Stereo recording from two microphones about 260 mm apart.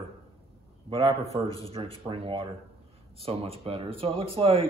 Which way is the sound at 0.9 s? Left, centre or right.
Right.